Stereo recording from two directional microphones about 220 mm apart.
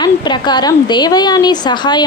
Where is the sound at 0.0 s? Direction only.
20° left (ahead or behind).